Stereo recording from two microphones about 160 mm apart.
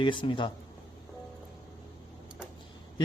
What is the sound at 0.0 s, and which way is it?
Speech, 30° left (ahead or behind).